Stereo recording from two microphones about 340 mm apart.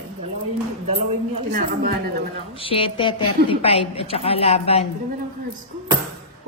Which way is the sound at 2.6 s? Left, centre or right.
Centre.